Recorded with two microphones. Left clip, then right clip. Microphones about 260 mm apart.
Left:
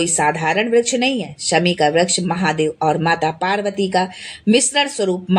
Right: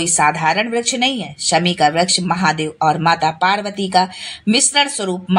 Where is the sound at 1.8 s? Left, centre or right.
Right.